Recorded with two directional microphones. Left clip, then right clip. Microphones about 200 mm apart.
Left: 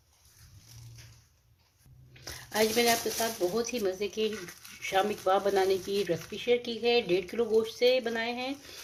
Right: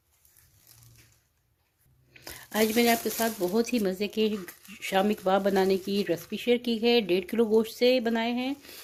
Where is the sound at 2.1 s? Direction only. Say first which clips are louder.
Right 1 dB; 40° right (ahead or behind).